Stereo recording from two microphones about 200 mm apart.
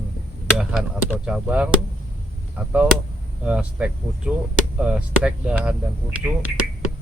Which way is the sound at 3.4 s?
5° right (ahead or behind).